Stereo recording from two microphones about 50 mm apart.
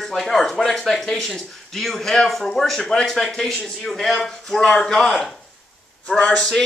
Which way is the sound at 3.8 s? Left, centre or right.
Centre.